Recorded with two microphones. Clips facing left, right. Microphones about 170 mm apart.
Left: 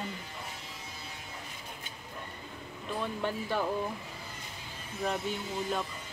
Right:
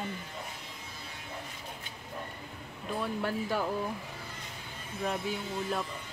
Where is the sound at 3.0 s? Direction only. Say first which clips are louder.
Right 1 dB; 5° right (ahead or behind).